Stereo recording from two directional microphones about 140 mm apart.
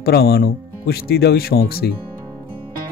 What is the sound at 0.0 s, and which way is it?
Speech, 90° left.